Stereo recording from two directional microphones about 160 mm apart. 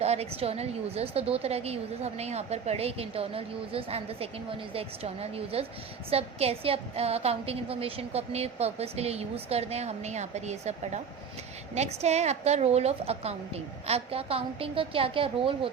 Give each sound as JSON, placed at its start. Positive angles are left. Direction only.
{"t": 0.0, "sound": "a woman's voice", "side_deg": -40}